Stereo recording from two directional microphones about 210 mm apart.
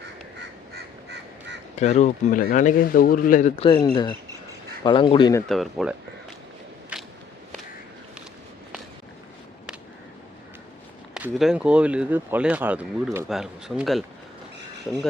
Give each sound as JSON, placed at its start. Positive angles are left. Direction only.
{"t": 0.3, "sound": "crow", "side_deg": -55}
{"t": 1.7, "sound": "speech", "side_deg": 30}
{"t": 3.5, "sound": "speech", "side_deg": 25}
{"t": 5.5, "sound": "speech", "side_deg": 0}
{"t": 6.9, "sound": "a sound", "side_deg": -5}
{"t": 11.1, "sound": "speech", "side_deg": 0}